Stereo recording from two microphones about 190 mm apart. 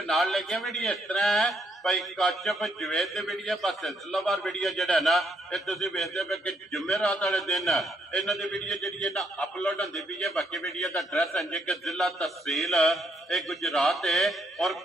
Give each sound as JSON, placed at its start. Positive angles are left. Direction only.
{"t": 0.0, "sound": "a man's voice", "side_deg": 0}